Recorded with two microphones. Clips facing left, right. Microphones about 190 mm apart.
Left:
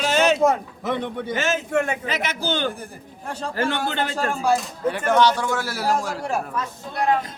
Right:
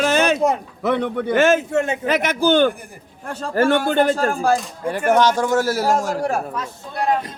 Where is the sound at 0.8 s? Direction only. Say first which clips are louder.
Right 6 dB; 65° right (ahead or behind).